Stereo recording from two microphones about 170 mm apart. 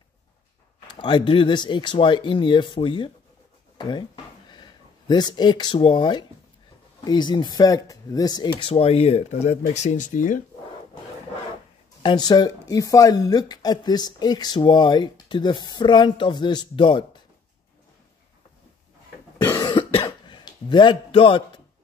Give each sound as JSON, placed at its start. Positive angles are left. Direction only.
{"t": 0.9, "sound": "speech", "side_deg": 30}
{"t": 3.7, "sound": "a sound", "side_deg": 25}
{"t": 7.1, "sound": "speech", "side_deg": 25}
{"t": 12.0, "sound": "speech", "side_deg": 25}
{"t": 19.4, "sound": "cough", "side_deg": 15}
{"t": 19.7, "sound": "cough", "side_deg": 30}